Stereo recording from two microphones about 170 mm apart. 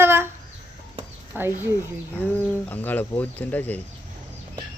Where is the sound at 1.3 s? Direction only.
10° right (ahead or behind).